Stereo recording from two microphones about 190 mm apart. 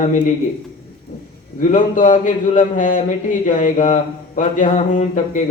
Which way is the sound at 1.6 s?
40° left (ahead or behind).